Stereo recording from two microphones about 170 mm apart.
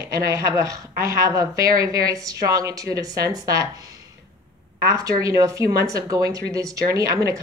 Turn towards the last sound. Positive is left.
turn(degrees=-20)  # may be behind; listen again after turning